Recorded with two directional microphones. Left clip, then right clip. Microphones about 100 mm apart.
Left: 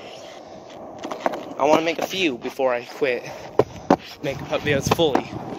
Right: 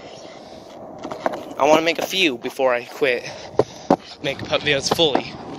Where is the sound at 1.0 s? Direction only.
30° left (ahead or behind).